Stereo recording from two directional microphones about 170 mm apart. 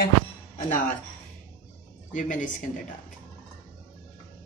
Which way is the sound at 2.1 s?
50° left (ahead or behind).